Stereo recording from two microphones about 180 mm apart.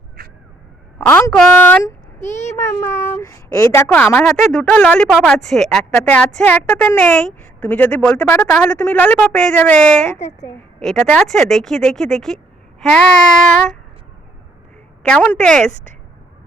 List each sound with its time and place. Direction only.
0.9 s a woman's voice: 5° left (ahead or behind)
2.1 s a child's voice: 40° left (ahead or behind)
2.6 s a woman's voice: 15° left (ahead or behind)
10.1 s a woman's voice: 15° left (ahead or behind)
10.8 s speech: 5° left (ahead or behind)
15.0 s speech: 5° left (ahead or behind)